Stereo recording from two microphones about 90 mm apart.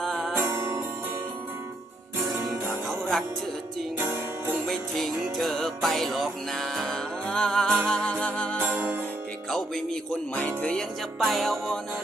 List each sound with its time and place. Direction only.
0.0 s music: centre (ahead or behind)
0.3 s music: 25° right (ahead or behind)
2.3 s music: 30° right (ahead or behind)
3.9 s music: 25° right (ahead or behind)
4.6 s music: centre (ahead or behind)
8.6 s music: 15° right (ahead or behind)
9.5 s music: 5° left (ahead or behind)
11.2 s music: centre (ahead or behind)